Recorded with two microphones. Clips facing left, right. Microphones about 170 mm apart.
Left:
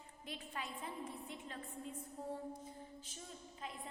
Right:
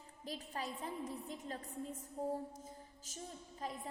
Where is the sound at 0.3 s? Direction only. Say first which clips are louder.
Right 4 dB; 40° right (ahead or behind).